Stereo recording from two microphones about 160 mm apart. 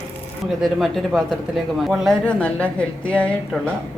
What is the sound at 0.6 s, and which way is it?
Speech, centre (ahead or behind).